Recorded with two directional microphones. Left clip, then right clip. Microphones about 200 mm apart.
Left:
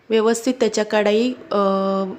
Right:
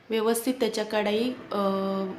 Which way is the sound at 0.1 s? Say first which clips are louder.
Left 8 dB; 35° left (ahead or behind).